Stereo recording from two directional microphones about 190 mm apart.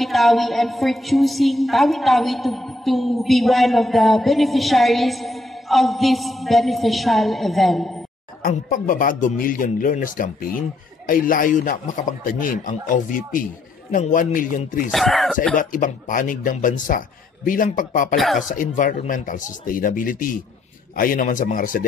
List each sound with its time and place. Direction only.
0.0 s a woman's voice: centre (ahead or behind)
8.4 s a man's voice: 45° left (ahead or behind)
14.9 s a woman's voice: centre (ahead or behind)
15.5 s a man's voice: 45° left (ahead or behind)
18.1 s a woman's voice: centre (ahead or behind)
18.5 s a man's voice: 45° left (ahead or behind)